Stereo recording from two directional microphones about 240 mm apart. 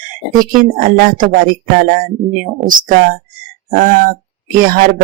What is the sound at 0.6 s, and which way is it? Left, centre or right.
Speech, right.